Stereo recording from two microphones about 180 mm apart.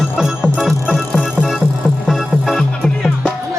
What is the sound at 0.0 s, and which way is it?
Music, centre (ahead or behind).